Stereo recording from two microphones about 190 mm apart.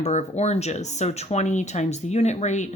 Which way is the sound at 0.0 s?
35° left (ahead or behind).